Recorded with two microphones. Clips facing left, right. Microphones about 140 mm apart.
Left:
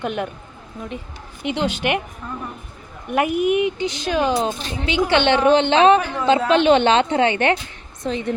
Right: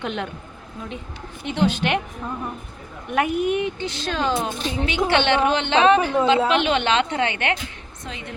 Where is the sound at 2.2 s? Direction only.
25° right (ahead or behind).